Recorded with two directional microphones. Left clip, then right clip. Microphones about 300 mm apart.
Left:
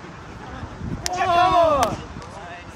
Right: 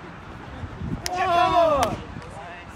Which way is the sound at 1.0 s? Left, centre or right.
Centre.